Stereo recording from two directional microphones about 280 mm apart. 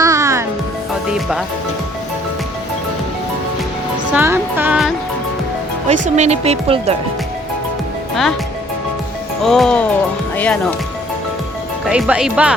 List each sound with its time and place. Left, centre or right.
0.0 s music: centre
1.1 s speech: centre
4.1 s speech: centre
6.1 s speech: right
8.1 s speech: centre
9.4 s speech: centre
11.9 s speech: centre